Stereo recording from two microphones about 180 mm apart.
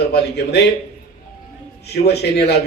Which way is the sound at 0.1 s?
65° left (ahead or behind).